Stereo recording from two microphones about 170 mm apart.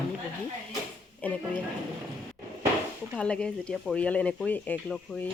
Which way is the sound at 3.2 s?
5° left (ahead or behind).